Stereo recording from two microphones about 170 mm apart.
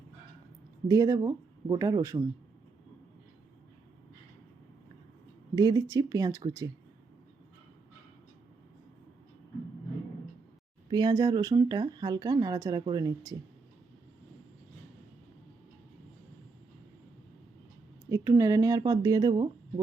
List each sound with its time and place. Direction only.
0.9 s speech: 20° right (ahead or behind)
5.5 s speech: 20° right (ahead or behind)
10.8 s speech: 25° right (ahead or behind)
18.1 s speech: 20° right (ahead or behind)